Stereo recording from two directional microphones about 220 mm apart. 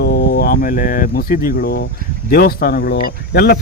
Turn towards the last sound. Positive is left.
turn(degrees=45)  # may be behind; listen again after turning